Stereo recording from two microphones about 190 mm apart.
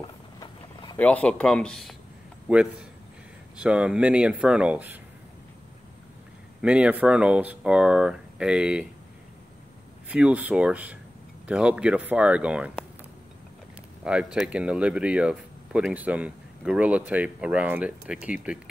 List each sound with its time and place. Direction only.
0.4 s a sound: 20° left (ahead or behind)
0.9 s a man's voice: 5° left (ahead or behind)
6.6 s speech: 5° right (ahead or behind)
10.0 s speech: 5° right (ahead or behind)
14.0 s speech: 5° right (ahead or behind)